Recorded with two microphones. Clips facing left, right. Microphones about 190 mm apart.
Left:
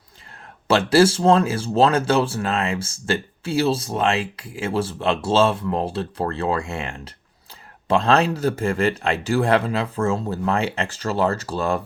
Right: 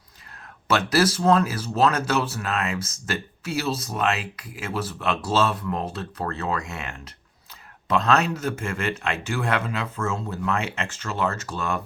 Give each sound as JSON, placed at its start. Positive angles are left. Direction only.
{"t": 0.7, "sound": "speech", "side_deg": 30}